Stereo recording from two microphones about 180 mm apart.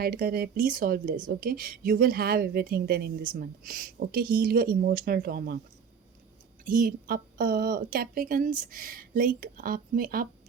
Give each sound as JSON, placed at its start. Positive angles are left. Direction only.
{"t": 0.0, "sound": "speech", "side_deg": -55}
{"t": 6.7, "sound": "speech", "side_deg": -50}